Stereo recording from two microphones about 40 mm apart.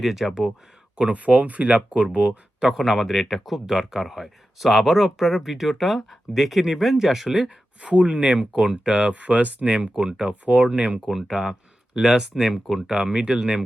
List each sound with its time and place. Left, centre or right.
0.0 s speech: centre
0.9 s speech: right
2.7 s speech: centre
7.8 s speech: right
11.0 s speech: centre